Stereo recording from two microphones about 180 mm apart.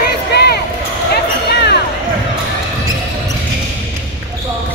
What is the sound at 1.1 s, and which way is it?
Basketball bounce, 65° left (ahead or behind).